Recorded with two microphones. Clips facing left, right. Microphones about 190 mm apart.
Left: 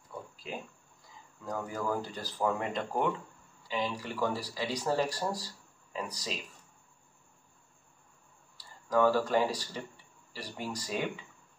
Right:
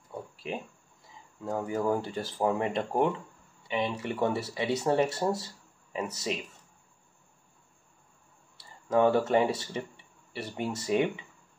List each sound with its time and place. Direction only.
1.4 s speech: 25° right (ahead or behind)
8.5 s speech: 25° right (ahead or behind)